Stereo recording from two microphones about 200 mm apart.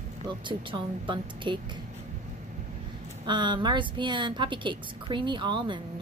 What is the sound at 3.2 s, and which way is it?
Speech, 25° right (ahead or behind).